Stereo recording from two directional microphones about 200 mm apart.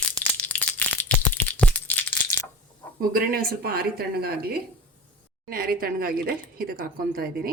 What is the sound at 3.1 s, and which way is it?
Speech, 50° right (ahead or behind).